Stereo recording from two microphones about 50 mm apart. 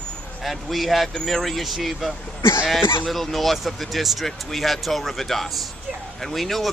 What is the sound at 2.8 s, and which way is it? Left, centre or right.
Speech, left.